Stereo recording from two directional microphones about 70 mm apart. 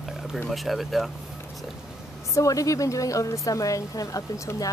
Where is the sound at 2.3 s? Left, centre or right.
Left.